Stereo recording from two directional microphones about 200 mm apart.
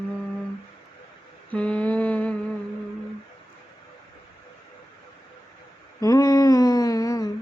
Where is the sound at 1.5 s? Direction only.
5° left (ahead or behind).